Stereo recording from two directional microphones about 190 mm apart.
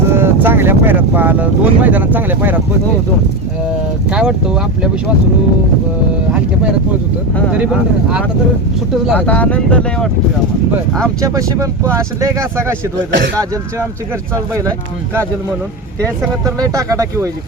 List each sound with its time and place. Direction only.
0.1 s speech: 10° right (ahead or behind)
4.1 s speech: 5° right (ahead or behind)
7.6 s speech: 5° right (ahead or behind)
9.1 s speech: 10° left (ahead or behind)
11.2 s speech: 15° right (ahead or behind)
13.1 s speech: 70° right (ahead or behind)
16.7 s speech: 15° right (ahead or behind)